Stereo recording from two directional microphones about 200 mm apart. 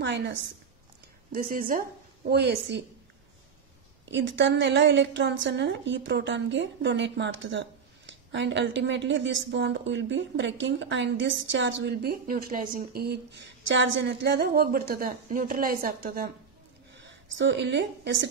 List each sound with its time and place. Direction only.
0.0 s speech: 60° right (ahead or behind)
1.3 s a woman's voice: 45° right (ahead or behind)
4.1 s speech: 65° right (ahead or behind); by 16.3 s 45° right (ahead or behind)
17.4 s speech: 60° right (ahead or behind)